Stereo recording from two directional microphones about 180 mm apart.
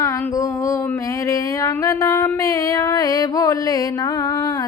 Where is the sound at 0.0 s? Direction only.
20° left (ahead or behind).